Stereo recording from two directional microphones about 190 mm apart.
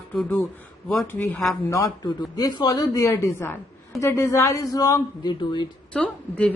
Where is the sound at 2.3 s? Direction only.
20° left (ahead or behind).